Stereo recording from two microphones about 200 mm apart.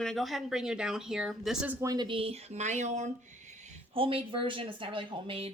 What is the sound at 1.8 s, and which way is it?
Speech, 20° right (ahead or behind).